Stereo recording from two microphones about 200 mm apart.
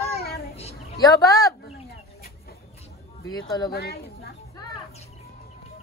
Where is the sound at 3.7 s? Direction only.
55° left (ahead or behind).